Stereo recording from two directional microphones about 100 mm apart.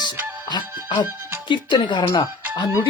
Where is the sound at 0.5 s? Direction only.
50° left (ahead or behind).